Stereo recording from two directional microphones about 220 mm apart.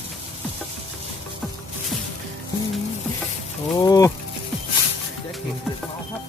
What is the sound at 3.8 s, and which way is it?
Speech, 15° left (ahead or behind).